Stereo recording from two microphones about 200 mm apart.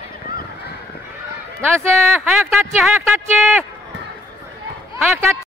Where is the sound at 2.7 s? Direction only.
Centre (ahead or behind).